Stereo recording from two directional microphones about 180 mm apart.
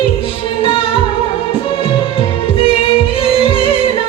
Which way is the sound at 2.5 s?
30° left (ahead or behind).